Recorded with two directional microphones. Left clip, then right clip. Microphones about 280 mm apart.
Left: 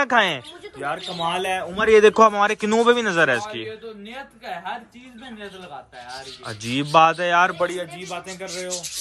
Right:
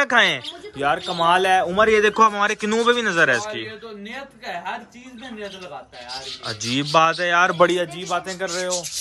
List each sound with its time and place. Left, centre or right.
0.0 s a man's voice: centre
1.1 s a man's voice: centre
2.0 s a man's voice: centre
6.4 s a man's voice: centre
7.5 s a man's voice: right
7.8 s a man's voice: centre